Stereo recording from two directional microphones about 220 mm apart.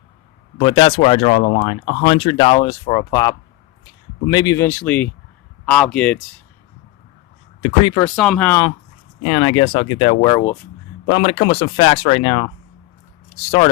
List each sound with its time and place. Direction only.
0.6 s speech: 25° left (ahead or behind); by 6.2 s 5° left (ahead or behind)
7.6 s speech: 20° left (ahead or behind)
8.0 s speech: 5° left (ahead or behind)
9.2 s speech: 25° left (ahead or behind)
10.3 s speech: 15° left (ahead or behind)